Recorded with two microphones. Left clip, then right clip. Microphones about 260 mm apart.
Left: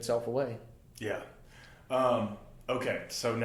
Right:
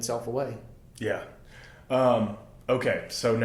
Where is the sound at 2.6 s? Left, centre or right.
Left.